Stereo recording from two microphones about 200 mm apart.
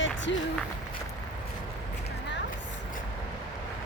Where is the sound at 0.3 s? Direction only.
65° left (ahead or behind).